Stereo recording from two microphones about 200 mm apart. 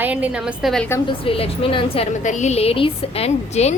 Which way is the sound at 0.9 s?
15° left (ahead or behind).